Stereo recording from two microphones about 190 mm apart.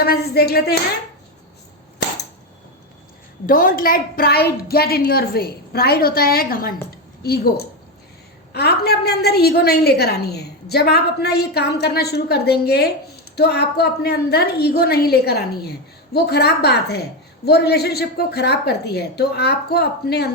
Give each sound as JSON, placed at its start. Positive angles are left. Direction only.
{"t": 0.0, "sound": "a woman's voice", "side_deg": 55}
{"t": 3.4, "sound": "a woman's voice", "side_deg": 45}